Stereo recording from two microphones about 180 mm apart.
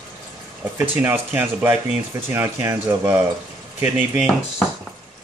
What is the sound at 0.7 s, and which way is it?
Speech, 15° right (ahead or behind).